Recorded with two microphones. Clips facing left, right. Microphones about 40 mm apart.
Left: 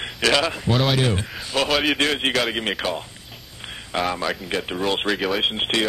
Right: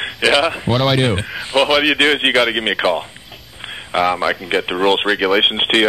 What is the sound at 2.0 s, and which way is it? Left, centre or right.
Speech, right.